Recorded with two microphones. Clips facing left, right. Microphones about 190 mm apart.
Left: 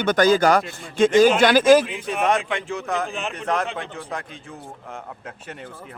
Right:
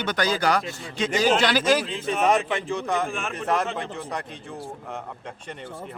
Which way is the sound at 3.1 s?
20° left (ahead or behind).